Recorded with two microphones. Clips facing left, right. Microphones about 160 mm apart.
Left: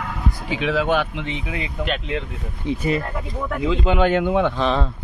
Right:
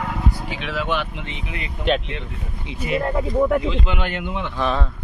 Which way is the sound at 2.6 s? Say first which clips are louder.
Left 14 dB; 50° left (ahead or behind).